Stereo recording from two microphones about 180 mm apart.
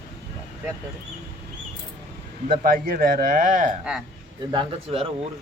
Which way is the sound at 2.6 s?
50° right (ahead or behind).